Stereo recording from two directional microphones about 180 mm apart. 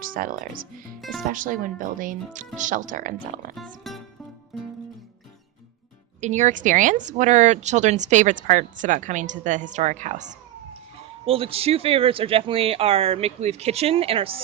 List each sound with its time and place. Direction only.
0.0 s speech: 50° right (ahead or behind)
3.9 s music: centre (ahead or behind)
6.1 s speech: 40° right (ahead or behind)
11.3 s speech: 30° right (ahead or behind)